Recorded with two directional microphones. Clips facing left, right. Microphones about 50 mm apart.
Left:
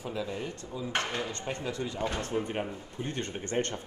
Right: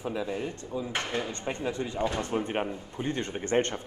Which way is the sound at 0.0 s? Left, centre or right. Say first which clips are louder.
Right 3 dB; right.